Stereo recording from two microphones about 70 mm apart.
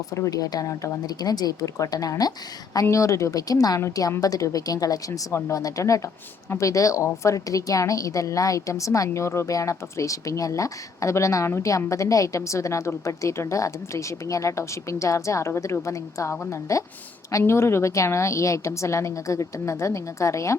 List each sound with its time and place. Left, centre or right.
0.1 s speech: left
1.0 s speech: left
2.9 s speech: left